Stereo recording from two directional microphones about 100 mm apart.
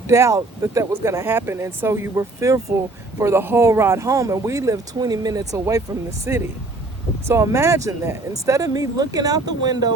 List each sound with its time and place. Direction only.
0.1 s speech: 30° right (ahead or behind)